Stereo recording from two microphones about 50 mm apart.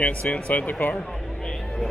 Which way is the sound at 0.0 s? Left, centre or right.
Left.